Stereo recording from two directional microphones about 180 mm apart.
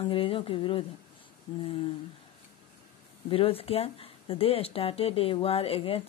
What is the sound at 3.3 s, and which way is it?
A woman's voice, 30° left (ahead or behind).